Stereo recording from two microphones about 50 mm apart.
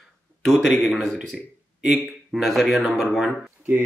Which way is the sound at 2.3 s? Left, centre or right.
Centre.